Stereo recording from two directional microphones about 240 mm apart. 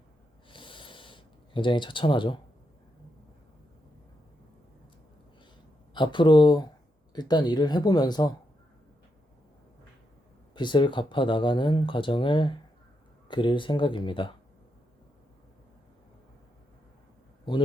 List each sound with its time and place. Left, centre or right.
0.5 s a sound: left
5.9 s speech: centre
10.5 s speech: centre
17.5 s speech: centre